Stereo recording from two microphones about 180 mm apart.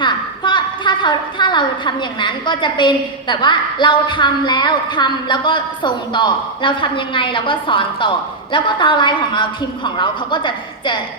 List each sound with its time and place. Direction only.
0.0 s a woman's voice: 25° left (ahead or behind)